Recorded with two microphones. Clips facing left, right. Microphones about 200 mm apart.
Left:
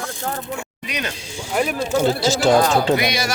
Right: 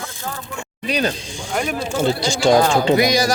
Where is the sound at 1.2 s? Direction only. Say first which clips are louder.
Left 1 dB; 5° left (ahead or behind).